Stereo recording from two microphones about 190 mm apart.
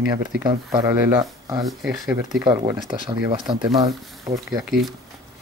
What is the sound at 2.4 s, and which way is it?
Speech, 25° right (ahead or behind).